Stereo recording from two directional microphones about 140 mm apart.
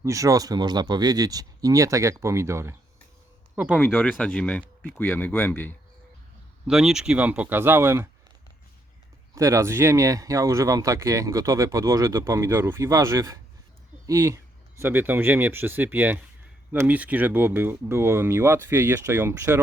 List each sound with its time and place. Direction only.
0.0 s speech: 25° right (ahead or behind)
3.5 s speech: 5° right (ahead or behind)
3.8 s speech: 10° left (ahead or behind)
6.7 s speech: 5° right (ahead or behind)
9.3 s speech: 20° right (ahead or behind)